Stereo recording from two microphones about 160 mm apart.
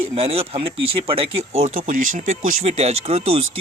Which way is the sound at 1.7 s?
55° right (ahead or behind).